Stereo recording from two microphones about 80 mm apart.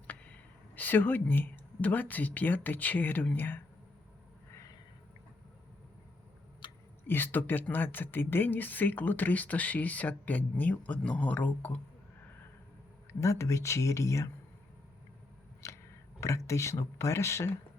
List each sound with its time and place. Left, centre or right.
0.8 s speech: left
6.6 s a sound: left
7.1 s speech: left
13.1 s speech: left
15.6 s a sound: left
16.2 s speech: left